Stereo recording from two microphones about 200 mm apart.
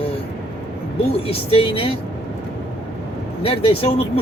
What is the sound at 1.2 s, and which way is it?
Speech, 30° left (ahead or behind).